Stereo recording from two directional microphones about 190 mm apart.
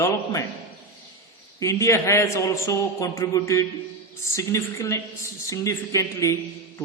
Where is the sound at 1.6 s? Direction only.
15° left (ahead or behind).